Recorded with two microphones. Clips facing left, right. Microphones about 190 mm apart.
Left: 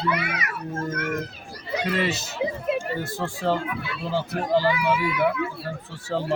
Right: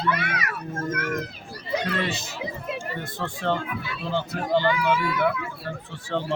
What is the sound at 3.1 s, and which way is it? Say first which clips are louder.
A child's voice: left 1 dB; 10° left (ahead or behind).